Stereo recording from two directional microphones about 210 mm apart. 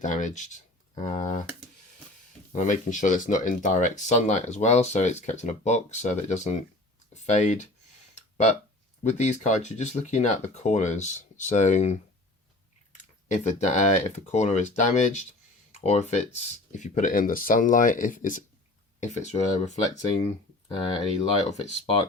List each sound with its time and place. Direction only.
0.0 s speech: 35° left (ahead or behind)
2.6 s speech: 35° left (ahead or behind)
8.1 s a sound: 30° left (ahead or behind)
9.0 s speech: 35° left (ahead or behind)
13.3 s speech: 35° left (ahead or behind)
21.2 s speech: 30° left (ahead or behind)